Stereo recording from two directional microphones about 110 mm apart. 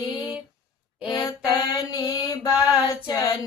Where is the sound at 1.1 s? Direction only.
35° left (ahead or behind).